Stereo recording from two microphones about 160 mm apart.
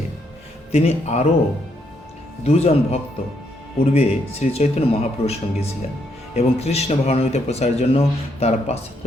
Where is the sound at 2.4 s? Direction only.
40° left (ahead or behind).